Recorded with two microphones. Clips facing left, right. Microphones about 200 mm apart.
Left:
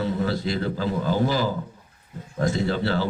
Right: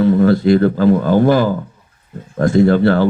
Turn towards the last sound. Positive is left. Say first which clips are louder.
# right 12 dB
turn(degrees=-55)  # may be behind; listen again after turning